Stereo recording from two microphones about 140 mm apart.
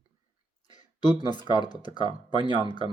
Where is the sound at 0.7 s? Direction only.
30° left (ahead or behind).